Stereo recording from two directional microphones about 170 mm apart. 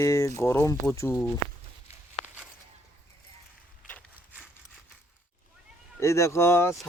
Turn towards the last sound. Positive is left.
turn(degrees=15)  # may be behind; listen again after turning